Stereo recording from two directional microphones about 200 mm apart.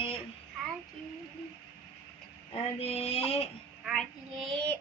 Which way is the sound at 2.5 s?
30° left (ahead or behind).